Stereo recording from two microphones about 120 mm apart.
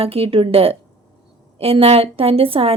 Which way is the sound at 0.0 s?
55° right (ahead or behind).